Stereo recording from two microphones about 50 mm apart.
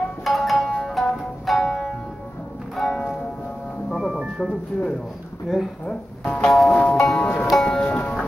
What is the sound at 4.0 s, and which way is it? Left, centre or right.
Music, centre.